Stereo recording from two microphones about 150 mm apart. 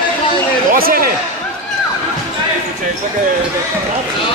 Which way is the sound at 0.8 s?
80° right.